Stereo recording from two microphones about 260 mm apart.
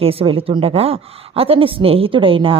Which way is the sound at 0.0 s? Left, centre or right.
Right.